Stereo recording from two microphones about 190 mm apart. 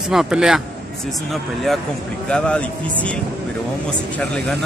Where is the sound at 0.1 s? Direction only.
5° right (ahead or behind).